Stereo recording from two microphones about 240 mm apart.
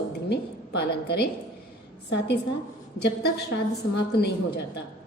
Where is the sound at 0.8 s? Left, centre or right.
Left.